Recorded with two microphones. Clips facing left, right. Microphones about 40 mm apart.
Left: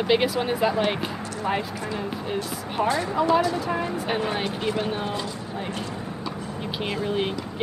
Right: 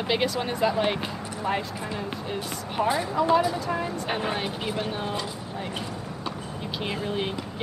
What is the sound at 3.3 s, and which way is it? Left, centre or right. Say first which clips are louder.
Speech: even; centre.